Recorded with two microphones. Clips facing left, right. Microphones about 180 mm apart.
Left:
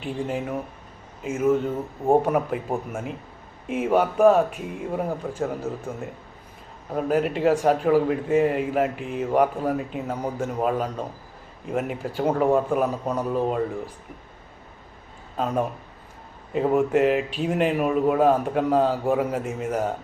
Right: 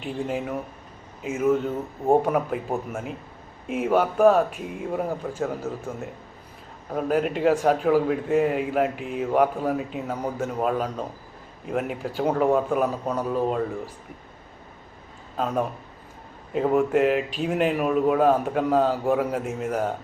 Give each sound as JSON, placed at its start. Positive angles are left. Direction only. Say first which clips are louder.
{"t": 0.0, "sound": "speech", "louder": "even", "side_deg": 0}
{"t": 15.4, "sound": "speech", "louder": "left 1 dB", "side_deg": 0}